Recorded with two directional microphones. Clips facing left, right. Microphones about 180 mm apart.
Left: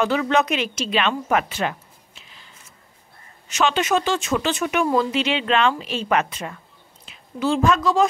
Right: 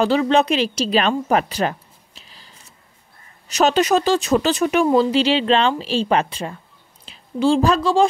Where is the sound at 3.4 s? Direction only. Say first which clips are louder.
Right 4 dB; 40° right (ahead or behind).